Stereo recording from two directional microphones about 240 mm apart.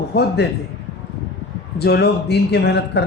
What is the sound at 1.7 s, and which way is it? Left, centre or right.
Speech, left.